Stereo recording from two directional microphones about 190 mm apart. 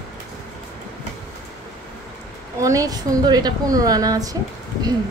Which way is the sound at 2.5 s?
15° right (ahead or behind).